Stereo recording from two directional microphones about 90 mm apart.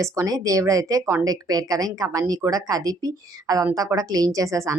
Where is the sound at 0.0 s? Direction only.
35° right (ahead or behind).